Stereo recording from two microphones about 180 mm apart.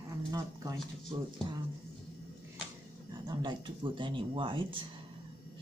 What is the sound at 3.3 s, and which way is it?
Speech, 25° right (ahead or behind).